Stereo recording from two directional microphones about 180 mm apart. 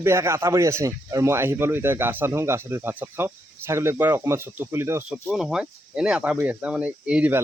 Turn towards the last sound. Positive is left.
turn(degrees=-10)  # may be behind; listen again after turning